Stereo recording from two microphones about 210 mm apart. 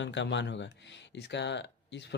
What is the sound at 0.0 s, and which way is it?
Speech, 60° left (ahead or behind).